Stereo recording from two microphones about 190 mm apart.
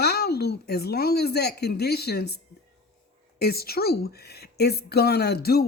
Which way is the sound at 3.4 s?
55° left (ahead or behind).